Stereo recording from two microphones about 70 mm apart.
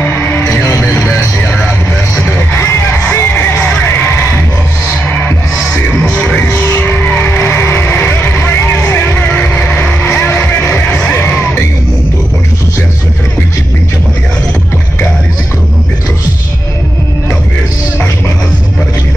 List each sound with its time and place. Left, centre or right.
0.1 s music: left
2.9 s music: left
6.0 s music: centre
6.3 s music: left
8.4 s vehicle: left; by 10.2 s centre
10.2 s music: left